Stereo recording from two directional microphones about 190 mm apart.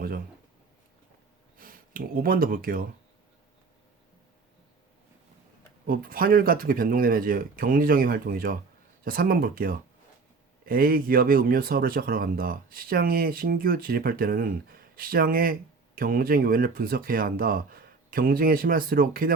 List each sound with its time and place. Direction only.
1.5 s speech: 50° right (ahead or behind)
5.9 s speech: 50° right (ahead or behind)